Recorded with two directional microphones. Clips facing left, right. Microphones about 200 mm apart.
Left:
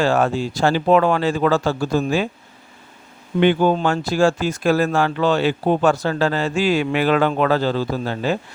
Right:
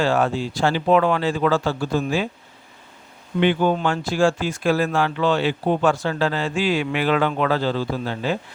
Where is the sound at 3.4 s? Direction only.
35° left (ahead or behind).